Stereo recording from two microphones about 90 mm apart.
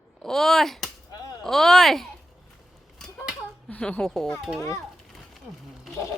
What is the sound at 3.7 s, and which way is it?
Speech, 10° left (ahead or behind).